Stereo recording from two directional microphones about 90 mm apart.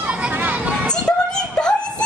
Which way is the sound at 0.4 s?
15° right (ahead or behind).